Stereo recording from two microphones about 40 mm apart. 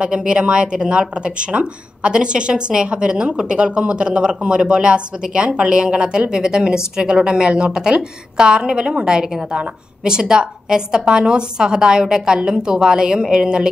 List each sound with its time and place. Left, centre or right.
0.0 s speech: right